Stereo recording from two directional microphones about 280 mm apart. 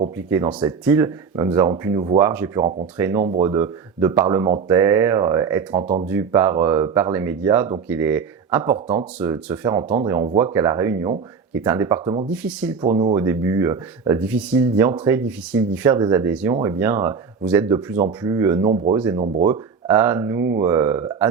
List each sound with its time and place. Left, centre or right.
0.2 s speech: centre
5.8 s speech: right
6.1 s speech: centre
12.3 s speech: centre
12.8 s speech: centre